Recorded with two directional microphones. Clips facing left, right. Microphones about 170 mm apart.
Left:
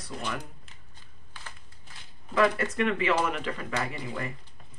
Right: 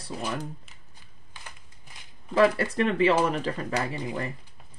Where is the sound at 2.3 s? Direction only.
30° right (ahead or behind).